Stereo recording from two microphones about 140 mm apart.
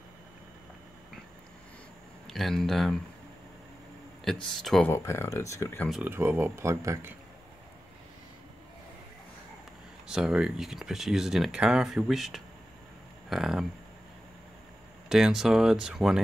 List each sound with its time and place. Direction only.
2.2 s speech: centre (ahead or behind)
4.2 s speech: centre (ahead or behind)
4.8 s speech: 20° left (ahead or behind)
6.0 s speech: 15° right (ahead or behind)
10.0 s speech: 5° right (ahead or behind)
15.0 s speech: 5° right (ahead or behind)